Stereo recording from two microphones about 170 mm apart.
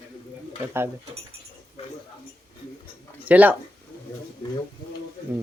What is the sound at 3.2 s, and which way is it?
Speech, 10° right (ahead or behind).